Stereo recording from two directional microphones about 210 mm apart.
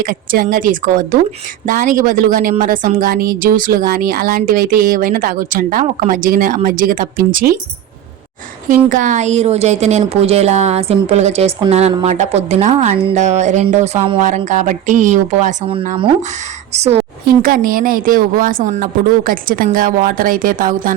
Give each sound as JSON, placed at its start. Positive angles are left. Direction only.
{"t": 0.0, "sound": "speech", "side_deg": -40}
{"t": 8.7, "sound": "speech", "side_deg": -40}